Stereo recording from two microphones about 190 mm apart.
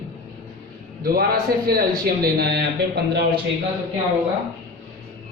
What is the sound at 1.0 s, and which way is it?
A man's voice, 50° right (ahead or behind).